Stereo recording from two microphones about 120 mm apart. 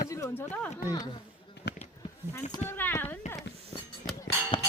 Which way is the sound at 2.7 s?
20° left (ahead or behind).